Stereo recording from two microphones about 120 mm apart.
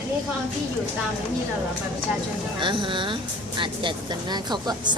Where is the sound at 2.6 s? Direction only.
40° right (ahead or behind).